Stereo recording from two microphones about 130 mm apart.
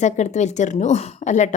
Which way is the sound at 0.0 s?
65° left (ahead or behind).